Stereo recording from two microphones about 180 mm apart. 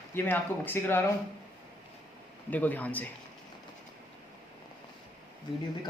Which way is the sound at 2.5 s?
10° left (ahead or behind).